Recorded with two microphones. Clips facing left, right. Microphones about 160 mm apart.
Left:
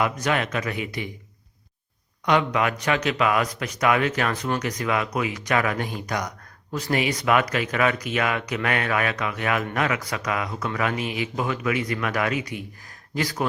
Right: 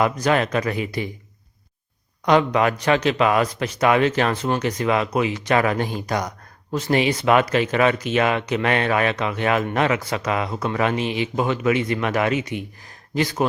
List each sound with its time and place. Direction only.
0.0 s speech: 35° right (ahead or behind)
2.2 s speech: 35° right (ahead or behind)